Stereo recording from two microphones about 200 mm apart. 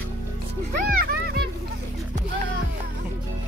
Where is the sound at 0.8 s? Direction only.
50° right (ahead or behind).